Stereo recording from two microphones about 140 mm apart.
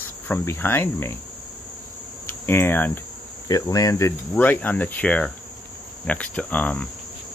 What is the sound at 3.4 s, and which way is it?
Cricket, 25° left (ahead or behind).